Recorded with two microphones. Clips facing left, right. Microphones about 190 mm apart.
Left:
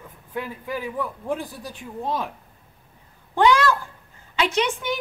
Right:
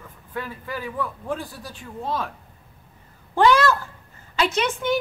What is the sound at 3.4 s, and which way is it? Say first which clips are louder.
Speech: right 1 dB; 15° left (ahead or behind).